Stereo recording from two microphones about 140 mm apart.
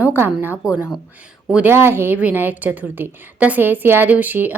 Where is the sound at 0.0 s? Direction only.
10° right (ahead or behind).